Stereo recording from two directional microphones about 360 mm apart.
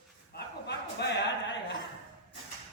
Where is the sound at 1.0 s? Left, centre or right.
Left.